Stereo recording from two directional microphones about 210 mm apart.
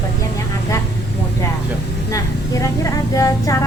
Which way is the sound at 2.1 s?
15° left (ahead or behind).